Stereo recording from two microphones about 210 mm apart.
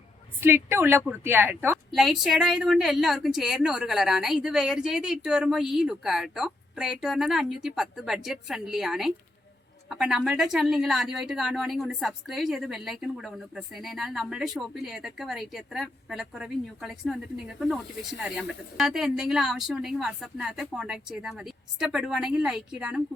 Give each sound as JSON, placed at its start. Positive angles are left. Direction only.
{"t": 0.3, "sound": "a woman's voice", "side_deg": -10}
{"t": 1.9, "sound": "a woman's voice", "side_deg": 0}